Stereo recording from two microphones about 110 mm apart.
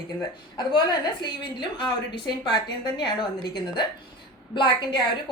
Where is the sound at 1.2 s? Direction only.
40° left (ahead or behind).